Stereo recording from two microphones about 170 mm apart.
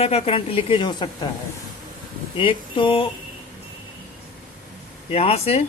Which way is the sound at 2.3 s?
30° left (ahead or behind).